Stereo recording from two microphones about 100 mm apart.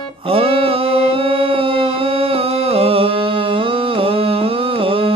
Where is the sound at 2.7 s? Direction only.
75° right (ahead or behind).